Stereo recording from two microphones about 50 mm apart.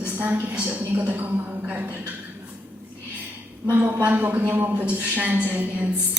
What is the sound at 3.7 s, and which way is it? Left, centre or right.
Speech, right.